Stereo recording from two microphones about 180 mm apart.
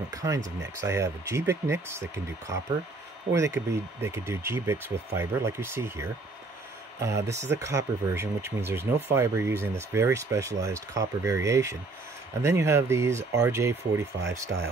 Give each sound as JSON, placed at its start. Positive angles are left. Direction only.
{"t": 0.1, "sound": "speech", "side_deg": -20}